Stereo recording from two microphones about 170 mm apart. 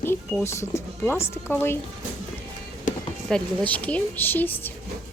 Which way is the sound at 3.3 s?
10° left (ahead or behind).